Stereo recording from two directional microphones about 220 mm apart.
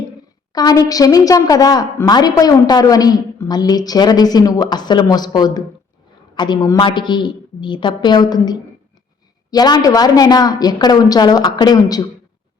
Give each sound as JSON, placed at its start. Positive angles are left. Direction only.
{"t": 0.5, "sound": "a woman's voice", "side_deg": 15}